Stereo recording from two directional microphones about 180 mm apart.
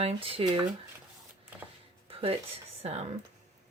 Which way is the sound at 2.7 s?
35° right (ahead or behind).